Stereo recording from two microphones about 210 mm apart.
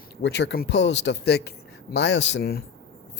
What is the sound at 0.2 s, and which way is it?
Speech, 60° left (ahead or behind).